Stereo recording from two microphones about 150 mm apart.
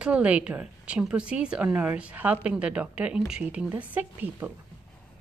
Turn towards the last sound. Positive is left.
turn(degrees=-10)  # may be behind; listen again after turning